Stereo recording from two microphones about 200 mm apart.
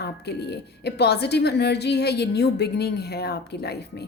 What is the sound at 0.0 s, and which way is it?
A woman's voice, 55° left (ahead or behind).